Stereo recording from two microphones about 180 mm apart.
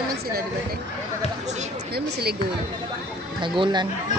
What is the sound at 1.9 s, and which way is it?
Speech, 60° right (ahead or behind).